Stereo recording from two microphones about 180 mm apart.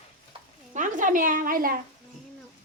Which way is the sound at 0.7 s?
45° right (ahead or behind).